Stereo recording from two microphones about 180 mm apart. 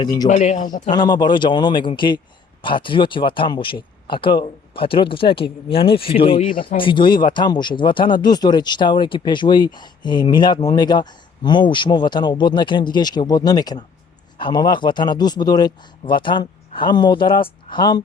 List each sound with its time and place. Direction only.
0.0 s speech: 25° left (ahead or behind)
0.3 s a man's voice: 40° left (ahead or behind)
0.9 s speech: 25° left (ahead or behind)